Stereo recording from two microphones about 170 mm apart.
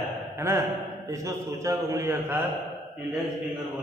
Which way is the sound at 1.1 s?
20° right (ahead or behind).